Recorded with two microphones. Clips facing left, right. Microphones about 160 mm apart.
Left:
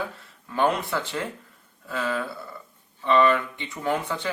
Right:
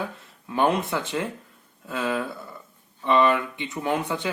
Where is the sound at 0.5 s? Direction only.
15° right (ahead or behind).